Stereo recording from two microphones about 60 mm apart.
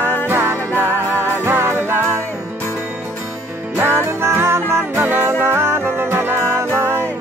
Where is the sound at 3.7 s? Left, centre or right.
Right.